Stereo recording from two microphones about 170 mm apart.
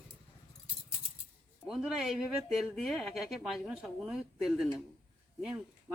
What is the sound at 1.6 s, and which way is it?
Speech, centre (ahead or behind).